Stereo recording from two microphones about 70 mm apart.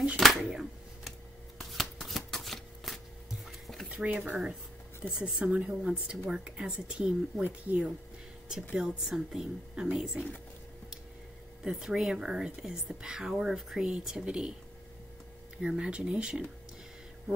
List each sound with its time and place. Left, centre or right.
0.2 s a sound: centre
1.6 s shuffling cards: centre
3.4 s dishes: centre
3.9 s speech: centre
8.7 s speech: centre
11.6 s speech: centre
15.6 s speech: centre